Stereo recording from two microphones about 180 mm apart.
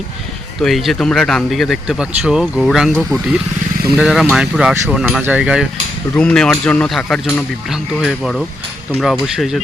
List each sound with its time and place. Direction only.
0.6 s speech: centre (ahead or behind)
6.1 s speech: 5° left (ahead or behind)